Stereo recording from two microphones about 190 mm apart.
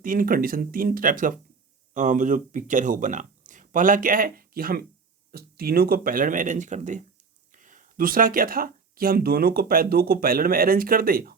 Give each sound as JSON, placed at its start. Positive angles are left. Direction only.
{"t": 0.0, "sound": "speech", "side_deg": -45}